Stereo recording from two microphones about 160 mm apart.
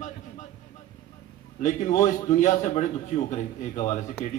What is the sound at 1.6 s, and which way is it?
Speech, 50° left (ahead or behind).